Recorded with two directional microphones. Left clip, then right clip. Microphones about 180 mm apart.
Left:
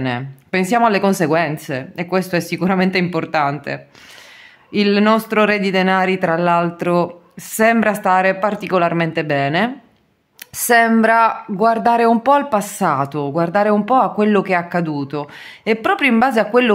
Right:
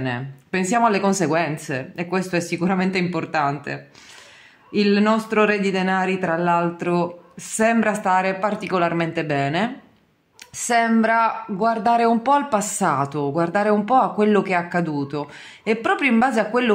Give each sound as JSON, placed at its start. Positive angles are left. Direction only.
{"t": 0.0, "sound": "speech", "side_deg": 35}
{"t": 10.5, "sound": "speech", "side_deg": 40}